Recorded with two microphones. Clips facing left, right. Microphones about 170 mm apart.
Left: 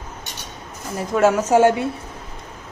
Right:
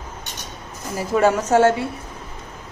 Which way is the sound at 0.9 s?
Centre (ahead or behind).